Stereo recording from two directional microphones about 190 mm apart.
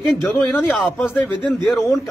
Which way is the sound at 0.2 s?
5° left (ahead or behind).